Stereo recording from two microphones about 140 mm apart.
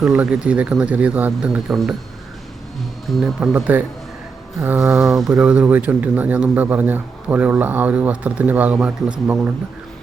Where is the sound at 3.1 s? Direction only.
Centre (ahead or behind).